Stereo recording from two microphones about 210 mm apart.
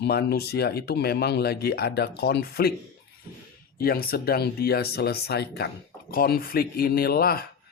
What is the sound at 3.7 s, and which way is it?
Speech, 45° left (ahead or behind).